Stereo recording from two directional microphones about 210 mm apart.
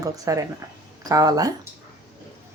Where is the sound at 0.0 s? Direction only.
15° right (ahead or behind).